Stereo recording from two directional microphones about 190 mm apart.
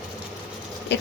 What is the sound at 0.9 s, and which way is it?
Rodents, 65° left (ahead or behind).